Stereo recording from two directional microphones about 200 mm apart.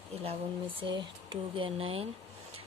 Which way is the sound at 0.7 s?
25° right (ahead or behind).